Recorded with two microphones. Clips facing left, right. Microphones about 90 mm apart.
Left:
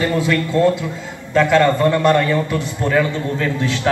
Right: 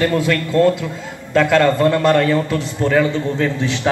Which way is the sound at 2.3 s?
30° right (ahead or behind).